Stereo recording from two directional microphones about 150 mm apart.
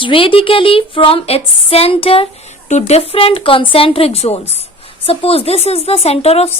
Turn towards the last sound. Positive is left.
turn(degrees=45)  # may be behind; listen again after turning